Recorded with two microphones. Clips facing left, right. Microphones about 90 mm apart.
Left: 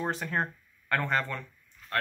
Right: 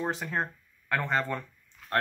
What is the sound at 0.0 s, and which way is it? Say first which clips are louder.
Speech: even; centre (ahead or behind).